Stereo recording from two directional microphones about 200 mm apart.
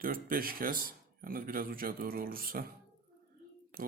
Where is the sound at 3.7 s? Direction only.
45° right (ahead or behind).